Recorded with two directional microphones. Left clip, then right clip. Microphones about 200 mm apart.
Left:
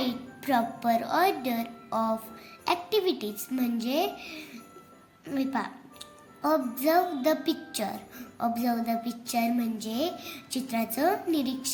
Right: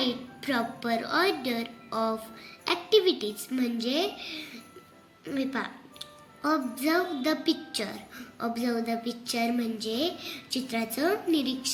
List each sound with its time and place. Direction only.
0.0 s a woman's voice: 50° left (ahead or behind)